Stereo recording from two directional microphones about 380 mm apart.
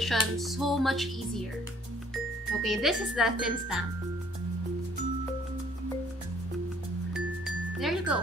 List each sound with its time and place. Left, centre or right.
0.0 s speech: centre
2.6 s speech: centre
7.2 s glockenspiel: centre